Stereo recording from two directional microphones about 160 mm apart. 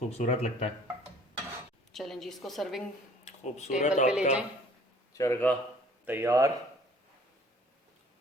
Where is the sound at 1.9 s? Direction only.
Centre (ahead or behind).